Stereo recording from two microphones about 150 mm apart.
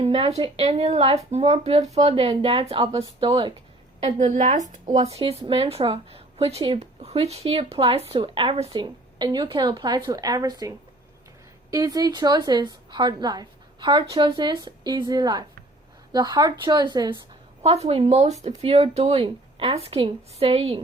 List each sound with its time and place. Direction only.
0.0 s speech: 40° right (ahead or behind)
3.0 s a woman's voice: 25° right (ahead or behind)
4.0 s speech: 55° right (ahead or behind)
8.7 s a woman's voice: 30° right (ahead or behind)
17.6 s speech: 45° right (ahead or behind)